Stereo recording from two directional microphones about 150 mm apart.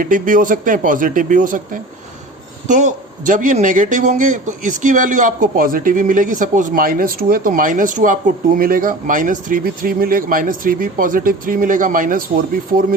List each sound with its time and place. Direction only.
0.0 s speech: 65° right (ahead or behind)